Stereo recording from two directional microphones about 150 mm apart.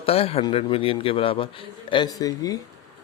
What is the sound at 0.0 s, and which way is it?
A man's voice, 40° left (ahead or behind).